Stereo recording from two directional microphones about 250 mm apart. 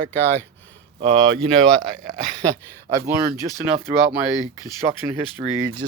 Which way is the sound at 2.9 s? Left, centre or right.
Centre.